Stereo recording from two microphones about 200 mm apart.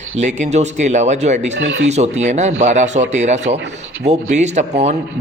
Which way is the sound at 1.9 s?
35° right (ahead or behind).